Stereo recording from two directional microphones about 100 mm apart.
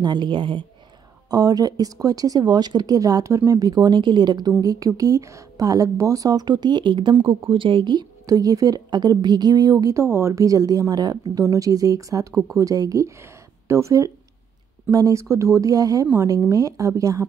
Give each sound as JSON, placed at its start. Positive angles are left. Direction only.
{"t": 0.0, "sound": "speech", "side_deg": -50}
{"t": 1.3, "sound": "speech", "side_deg": -40}